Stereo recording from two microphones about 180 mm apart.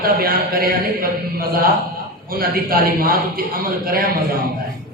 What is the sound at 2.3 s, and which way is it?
A man's voice, 55° right (ahead or behind).